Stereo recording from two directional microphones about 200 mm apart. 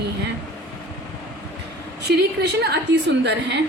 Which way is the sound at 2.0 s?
55° right (ahead or behind).